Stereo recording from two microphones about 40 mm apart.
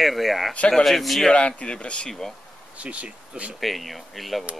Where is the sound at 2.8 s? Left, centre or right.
Right.